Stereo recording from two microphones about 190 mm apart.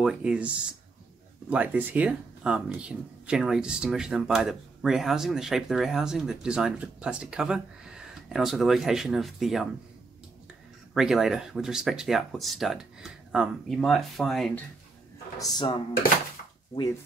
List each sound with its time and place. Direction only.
0.0 s speech: 5° right (ahead or behind)
11.0 s speech: centre (ahead or behind)
15.3 s speech: 20° left (ahead or behind)